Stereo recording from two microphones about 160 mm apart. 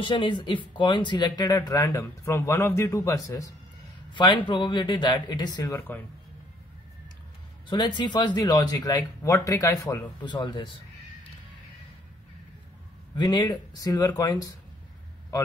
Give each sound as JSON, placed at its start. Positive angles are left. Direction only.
{"t": 0.0, "sound": "speech", "side_deg": 30}
{"t": 7.7, "sound": "speech", "side_deg": 30}
{"t": 13.1, "sound": "speech", "side_deg": 25}